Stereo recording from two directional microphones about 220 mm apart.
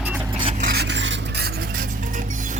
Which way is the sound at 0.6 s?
45° right (ahead or behind).